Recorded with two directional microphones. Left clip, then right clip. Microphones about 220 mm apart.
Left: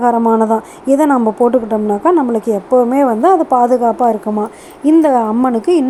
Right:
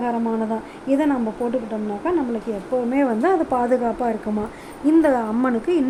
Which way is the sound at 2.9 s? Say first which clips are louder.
Left 9 dB; 10° left (ahead or behind).